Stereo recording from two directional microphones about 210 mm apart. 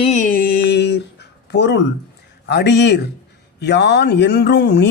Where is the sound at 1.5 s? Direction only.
55° left (ahead or behind).